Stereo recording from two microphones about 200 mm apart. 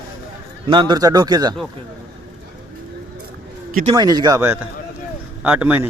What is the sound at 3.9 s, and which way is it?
A man's voice, 20° right (ahead or behind).